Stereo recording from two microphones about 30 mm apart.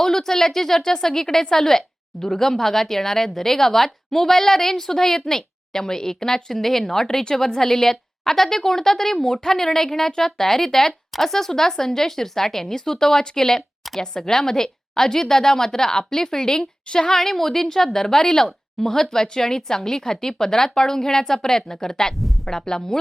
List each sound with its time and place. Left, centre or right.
0.0 s a woman's voice: centre
17.2 s a woman's voice: centre